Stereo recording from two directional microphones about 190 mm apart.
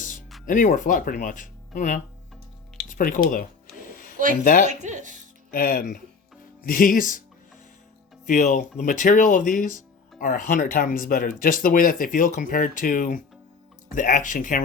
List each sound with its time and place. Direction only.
0.4 s speech: 45° left (ahead or behind)
2.9 s a sound: 45° left (ahead or behind)
4.6 s speech: 40° right (ahead or behind)
5.5 s speech: 50° left (ahead or behind)
8.3 s speech: 40° left (ahead or behind)